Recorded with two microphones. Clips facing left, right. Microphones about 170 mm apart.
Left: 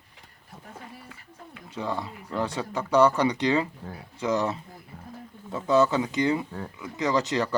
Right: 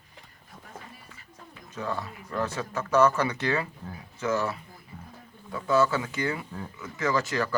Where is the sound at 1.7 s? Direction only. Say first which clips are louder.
Left 2 dB; 15° left (ahead or behind).